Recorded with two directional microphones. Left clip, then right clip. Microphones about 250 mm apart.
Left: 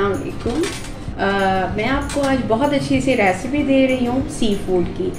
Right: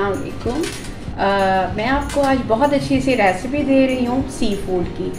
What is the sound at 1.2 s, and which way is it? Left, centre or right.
Speech, centre.